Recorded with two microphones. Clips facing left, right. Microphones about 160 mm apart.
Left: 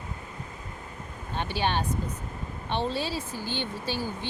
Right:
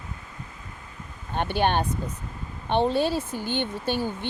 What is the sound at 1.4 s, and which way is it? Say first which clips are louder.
Speech: right 5 dB; 55° right (ahead or behind).